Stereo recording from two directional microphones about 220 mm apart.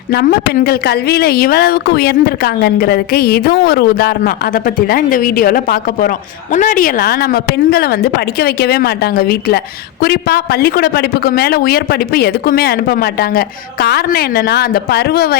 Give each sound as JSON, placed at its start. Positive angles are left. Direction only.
{"t": 0.1, "sound": "a woman's voice", "side_deg": 45}